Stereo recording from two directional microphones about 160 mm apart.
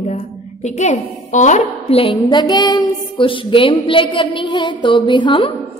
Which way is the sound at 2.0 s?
30° left (ahead or behind).